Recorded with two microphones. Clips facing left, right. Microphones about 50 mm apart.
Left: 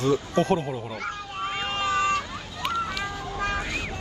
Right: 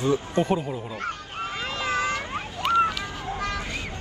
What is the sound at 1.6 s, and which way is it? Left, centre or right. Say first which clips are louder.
Cat: left 3 dB; left.